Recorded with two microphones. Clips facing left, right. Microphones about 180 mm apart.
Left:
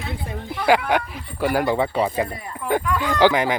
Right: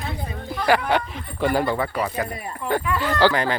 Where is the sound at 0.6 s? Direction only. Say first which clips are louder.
Left 1 dB; 10° left (ahead or behind).